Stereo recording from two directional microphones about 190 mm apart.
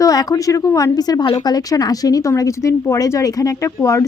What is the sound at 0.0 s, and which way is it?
Speech, 20° left (ahead or behind).